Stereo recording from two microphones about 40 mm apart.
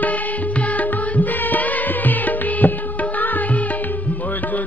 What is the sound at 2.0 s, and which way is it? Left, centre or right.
Music, left.